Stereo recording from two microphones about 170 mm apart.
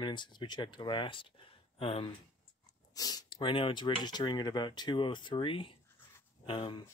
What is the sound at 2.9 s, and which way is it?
Speech, 20° left (ahead or behind).